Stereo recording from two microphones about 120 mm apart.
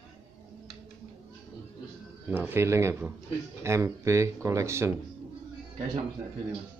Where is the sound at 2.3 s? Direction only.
20° right (ahead or behind).